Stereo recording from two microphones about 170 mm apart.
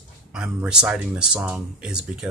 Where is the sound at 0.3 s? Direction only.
5° right (ahead or behind).